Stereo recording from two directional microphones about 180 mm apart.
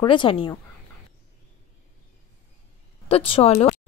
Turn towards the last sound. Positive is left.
turn(degrees=30)  # may be behind; listen again after turning